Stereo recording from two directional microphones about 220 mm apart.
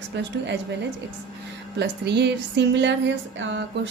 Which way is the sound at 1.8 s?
50° right (ahead or behind).